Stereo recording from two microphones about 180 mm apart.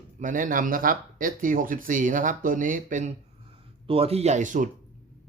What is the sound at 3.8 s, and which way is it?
Speech, 35° right (ahead or behind).